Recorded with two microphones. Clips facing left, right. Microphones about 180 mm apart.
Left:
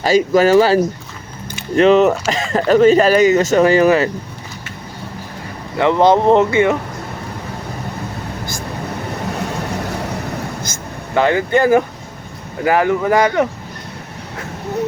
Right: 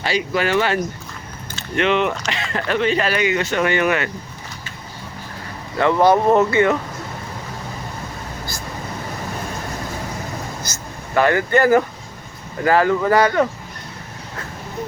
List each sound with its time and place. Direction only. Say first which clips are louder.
0.0 s speech: left 9 dB; 40° left (ahead or behind)
5.7 s speech: left 2 dB; 20° left (ahead or behind)
11.1 s speech: left 2 dB; 20° left (ahead or behind)